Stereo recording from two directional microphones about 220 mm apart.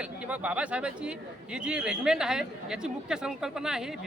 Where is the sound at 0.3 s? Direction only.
5° right (ahead or behind).